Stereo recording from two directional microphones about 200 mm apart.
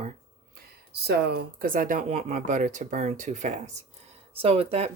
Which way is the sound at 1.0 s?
55° right (ahead or behind).